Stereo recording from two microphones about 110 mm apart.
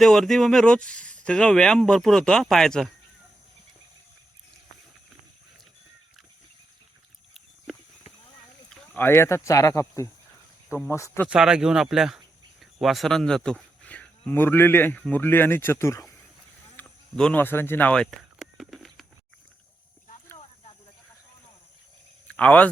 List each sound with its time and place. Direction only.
0.0 s speech: 5° left (ahead or behind)
8.7 s rowboat: 10° left (ahead or behind)
9.0 s speech: 25° left (ahead or behind)
11.3 s a man's voice: 5° right (ahead or behind); by 16.1 s 25° left (ahead or behind)
16.8 s a sound: 15° left (ahead or behind)
17.2 s speech: 10° left (ahead or behind)
17.4 s speech: 20° left (ahead or behind)
18.3 s a sound: centre (ahead or behind)
22.3 s speech: 10° left (ahead or behind)